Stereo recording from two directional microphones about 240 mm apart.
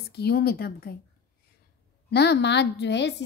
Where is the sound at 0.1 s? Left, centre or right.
Left.